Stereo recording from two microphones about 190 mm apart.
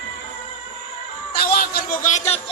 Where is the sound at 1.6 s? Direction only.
50° left (ahead or behind).